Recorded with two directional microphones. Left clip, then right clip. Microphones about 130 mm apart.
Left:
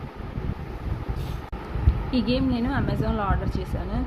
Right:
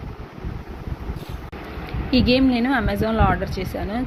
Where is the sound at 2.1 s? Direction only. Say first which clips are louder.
Right 7 dB; 40° right (ahead or behind).